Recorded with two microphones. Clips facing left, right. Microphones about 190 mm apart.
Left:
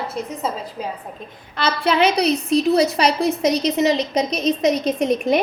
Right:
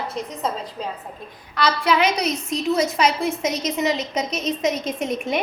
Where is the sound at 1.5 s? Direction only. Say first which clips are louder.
Even; 25° left (ahead or behind).